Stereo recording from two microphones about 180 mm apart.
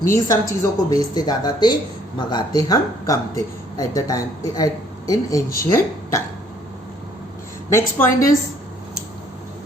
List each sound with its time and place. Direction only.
0.0 s speech: 20° left (ahead or behind)
7.7 s speech: 15° left (ahead or behind)